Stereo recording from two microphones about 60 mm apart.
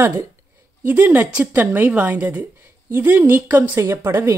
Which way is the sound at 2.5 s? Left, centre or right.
Right.